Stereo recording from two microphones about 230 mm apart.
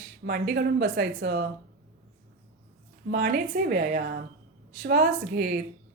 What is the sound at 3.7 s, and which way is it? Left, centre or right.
Speech, right.